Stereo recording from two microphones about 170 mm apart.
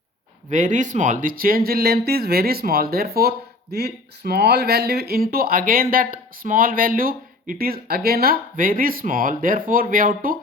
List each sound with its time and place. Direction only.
0.5 s speech: 45° right (ahead or behind)